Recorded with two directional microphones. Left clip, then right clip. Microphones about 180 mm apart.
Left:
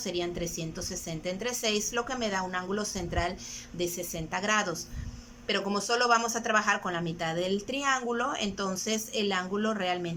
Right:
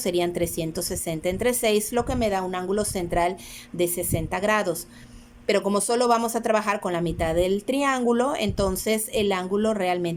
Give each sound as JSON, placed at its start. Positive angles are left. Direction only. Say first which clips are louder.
{"t": 0.0, "sound": "speech", "louder": "right 8 dB", "side_deg": -30}